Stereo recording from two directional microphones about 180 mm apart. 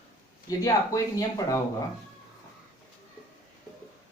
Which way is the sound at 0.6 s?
20° left (ahead or behind).